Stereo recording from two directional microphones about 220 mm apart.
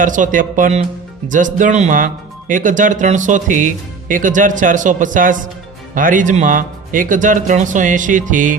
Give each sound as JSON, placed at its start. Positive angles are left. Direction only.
{"t": 0.0, "sound": "speech", "side_deg": -35}